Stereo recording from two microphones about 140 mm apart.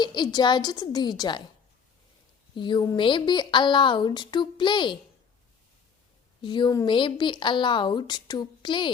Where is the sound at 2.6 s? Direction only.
35° left (ahead or behind).